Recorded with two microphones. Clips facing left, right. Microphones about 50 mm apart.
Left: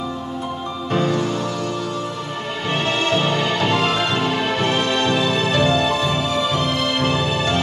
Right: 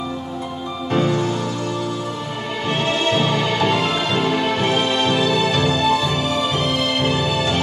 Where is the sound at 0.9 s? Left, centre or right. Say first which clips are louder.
Right 1 dB; right.